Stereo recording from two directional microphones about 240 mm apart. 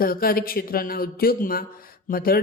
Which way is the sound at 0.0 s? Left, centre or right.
Left.